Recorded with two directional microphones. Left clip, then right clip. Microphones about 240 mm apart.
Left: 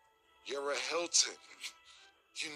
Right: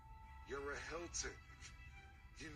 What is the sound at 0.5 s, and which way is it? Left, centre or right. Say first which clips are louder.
Speech: left 11 dB; left.